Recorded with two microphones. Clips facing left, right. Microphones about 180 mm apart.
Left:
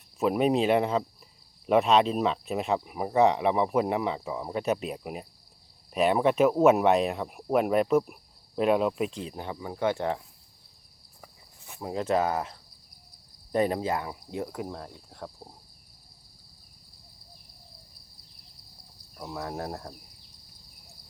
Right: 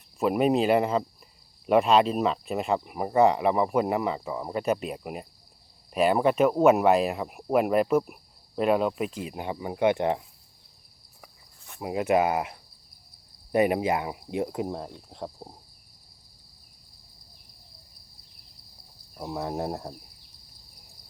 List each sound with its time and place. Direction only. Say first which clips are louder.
0.2 s speech: right 1 dB; centre (ahead or behind); by 10.2 s 15° right (ahead or behind)
11.8 s speech: right 3 dB; 10° right (ahead or behind)
15.1 s cricket: right 4 dB; 20° right (ahead or behind)
19.1 s cricket: right 4 dB; 20° right (ahead or behind)